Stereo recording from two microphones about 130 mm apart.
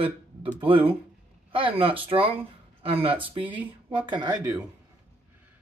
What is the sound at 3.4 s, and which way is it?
Speech, 10° right (ahead or behind).